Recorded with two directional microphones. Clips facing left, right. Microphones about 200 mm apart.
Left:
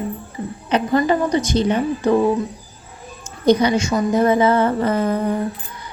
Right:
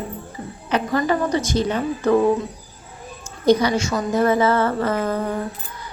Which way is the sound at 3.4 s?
15° left (ahead or behind).